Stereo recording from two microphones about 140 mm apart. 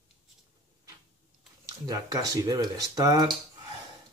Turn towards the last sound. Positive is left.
turn(degrees=-25)  # may be behind; listen again after turning